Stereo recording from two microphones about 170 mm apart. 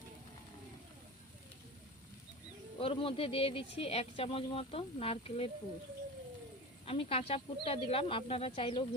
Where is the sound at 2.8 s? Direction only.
35° left (ahead or behind).